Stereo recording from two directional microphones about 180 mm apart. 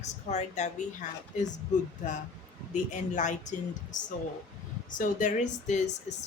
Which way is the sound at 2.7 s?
45° left (ahead or behind).